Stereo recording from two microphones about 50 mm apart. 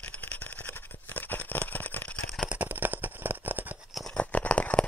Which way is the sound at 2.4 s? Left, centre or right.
Right.